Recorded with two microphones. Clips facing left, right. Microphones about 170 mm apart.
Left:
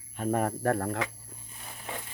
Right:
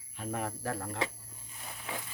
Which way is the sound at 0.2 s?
50° left (ahead or behind).